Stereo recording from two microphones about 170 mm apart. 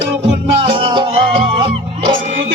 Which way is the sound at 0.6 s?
30° right (ahead or behind).